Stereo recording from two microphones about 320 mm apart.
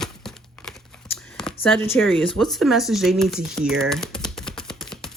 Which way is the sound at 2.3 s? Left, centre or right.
Centre.